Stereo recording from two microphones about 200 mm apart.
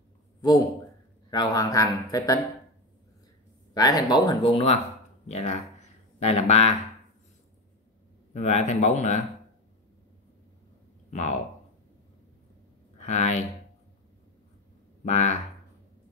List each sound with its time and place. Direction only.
1.3 s speech: 20° left (ahead or behind)
3.7 s speech: 20° left (ahead or behind)
8.3 s speech: 35° left (ahead or behind)
11.1 s speech: 35° left (ahead or behind)
13.0 s speech: 35° left (ahead or behind)
15.0 s speech: 35° left (ahead or behind)